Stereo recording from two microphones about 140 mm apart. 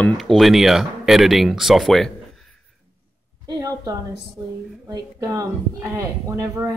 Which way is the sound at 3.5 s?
25° right (ahead or behind).